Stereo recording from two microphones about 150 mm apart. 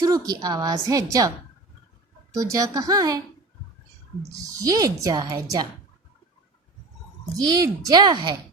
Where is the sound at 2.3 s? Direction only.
20° right (ahead or behind).